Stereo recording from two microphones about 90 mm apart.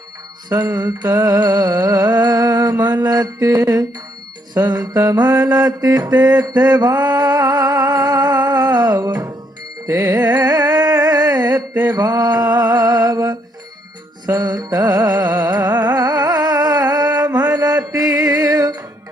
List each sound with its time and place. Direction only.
0.8 s music: 45° right (ahead or behind)
2.7 s mantra: 20° right (ahead or behind)
3.0 s music: 45° right (ahead or behind)
4.6 s mantra: 25° right (ahead or behind)
5.5 s music: 45° right (ahead or behind)
6.7 s humming: 45° right (ahead or behind)
9.8 s music: 45° right (ahead or behind)
15.6 s music: 20° right (ahead or behind)
16.0 s music: 45° right (ahead or behind)